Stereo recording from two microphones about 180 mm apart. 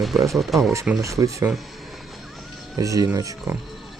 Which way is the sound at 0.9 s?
15° right (ahead or behind).